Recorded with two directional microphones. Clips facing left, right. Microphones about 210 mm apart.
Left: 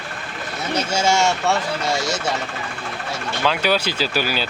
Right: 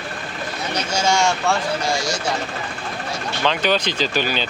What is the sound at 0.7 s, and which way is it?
Speech, 25° left (ahead or behind).